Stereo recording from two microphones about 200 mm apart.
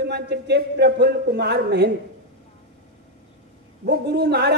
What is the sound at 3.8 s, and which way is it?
Speech, 55° right (ahead or behind).